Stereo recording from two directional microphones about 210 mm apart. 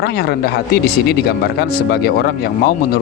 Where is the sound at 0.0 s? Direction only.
50° left (ahead or behind).